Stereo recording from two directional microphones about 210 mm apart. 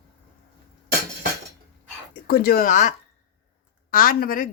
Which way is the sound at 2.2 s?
45° left (ahead or behind).